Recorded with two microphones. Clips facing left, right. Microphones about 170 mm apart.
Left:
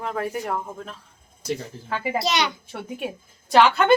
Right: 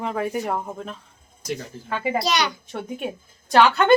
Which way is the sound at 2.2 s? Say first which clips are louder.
Left 1 dB; 25° left (ahead or behind).